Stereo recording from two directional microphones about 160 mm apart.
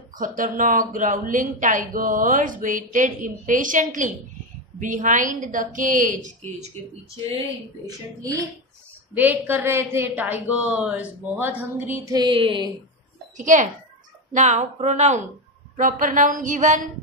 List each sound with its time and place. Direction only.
0.1 s a woman's voice: 60° right (ahead or behind)
7.8 s a woman's voice: 20° right (ahead or behind)
13.4 s a woman's voice: 50° right (ahead or behind)